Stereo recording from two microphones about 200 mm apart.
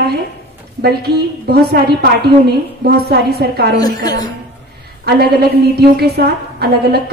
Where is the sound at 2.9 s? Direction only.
55° right (ahead or behind).